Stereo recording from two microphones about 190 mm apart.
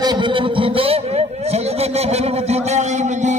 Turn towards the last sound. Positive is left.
turn(degrees=-35)  # may be behind; listen again after turning